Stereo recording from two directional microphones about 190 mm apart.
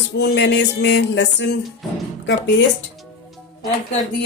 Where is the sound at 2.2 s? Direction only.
70° left (ahead or behind).